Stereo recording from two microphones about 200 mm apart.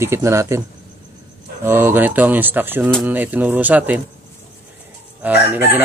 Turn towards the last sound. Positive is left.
turn(degrees=-10)  # may be behind; listen again after turning